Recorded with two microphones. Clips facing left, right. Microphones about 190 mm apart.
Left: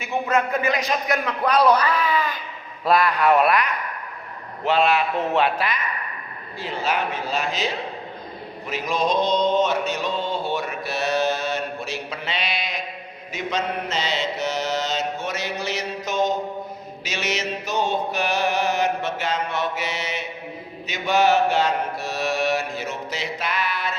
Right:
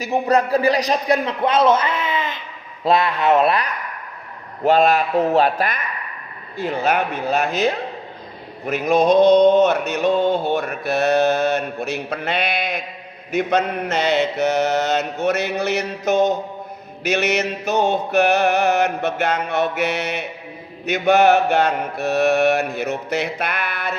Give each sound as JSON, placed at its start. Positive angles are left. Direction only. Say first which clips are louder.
{"t": 0.0, "sound": "speech", "louder": "right 5 dB", "side_deg": -35}
{"t": 4.6, "sound": "a man's voice", "louder": "right 4 dB", "side_deg": -45}
{"t": 6.6, "sound": "mantra", "louder": "right 5 dB", "side_deg": -55}